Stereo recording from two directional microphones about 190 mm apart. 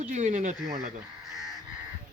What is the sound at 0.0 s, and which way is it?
Speech, 40° right (ahead or behind).